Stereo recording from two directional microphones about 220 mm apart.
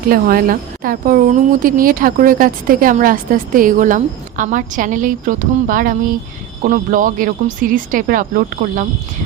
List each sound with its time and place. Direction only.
0.1 s speech: 40° right (ahead or behind)